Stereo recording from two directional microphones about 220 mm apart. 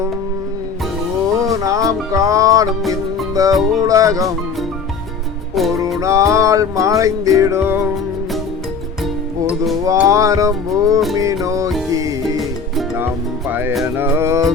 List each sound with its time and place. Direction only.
1.4 s music: 15° right (ahead or behind)
5.5 s music: centre (ahead or behind)
6.0 s music: 15° right (ahead or behind)
9.8 s music: 15° right (ahead or behind)
12.4 s music: centre (ahead or behind)